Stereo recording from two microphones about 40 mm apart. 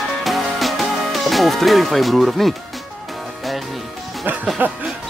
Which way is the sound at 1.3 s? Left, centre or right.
Centre.